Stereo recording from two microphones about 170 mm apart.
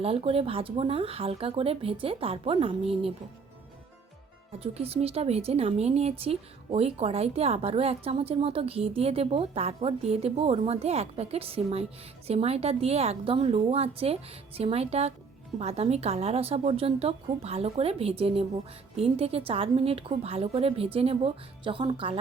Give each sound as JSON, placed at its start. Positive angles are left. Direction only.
{"t": 0.0, "sound": "a woman's voice", "side_deg": -35}
{"t": 4.6, "sound": "a woman's voice", "side_deg": -35}